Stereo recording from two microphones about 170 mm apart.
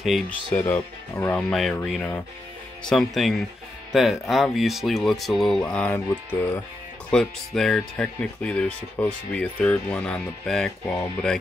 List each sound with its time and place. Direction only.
0.0 s speech: centre (ahead or behind)
0.7 s speech: 15° left (ahead or behind)
1.5 s speech: centre (ahead or behind)
7.1 s speech: 5° left (ahead or behind)